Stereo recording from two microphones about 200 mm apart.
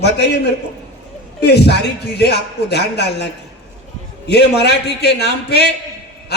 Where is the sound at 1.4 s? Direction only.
55° left (ahead or behind).